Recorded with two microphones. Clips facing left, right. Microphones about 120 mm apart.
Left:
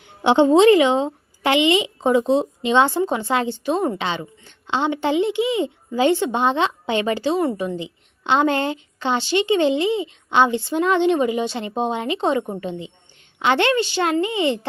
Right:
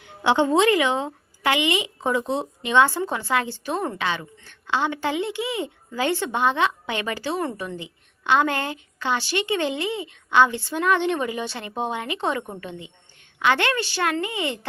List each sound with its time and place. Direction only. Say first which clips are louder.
0.0 s a woman's voice: left 5 dB; 25° left (ahead or behind)